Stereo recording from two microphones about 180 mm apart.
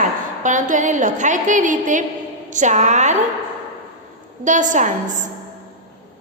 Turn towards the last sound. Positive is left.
turn(degrees=-45)  # may be behind; listen again after turning